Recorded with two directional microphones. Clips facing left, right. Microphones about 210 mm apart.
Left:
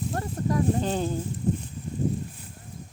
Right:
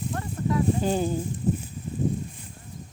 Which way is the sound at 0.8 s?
10° right (ahead or behind).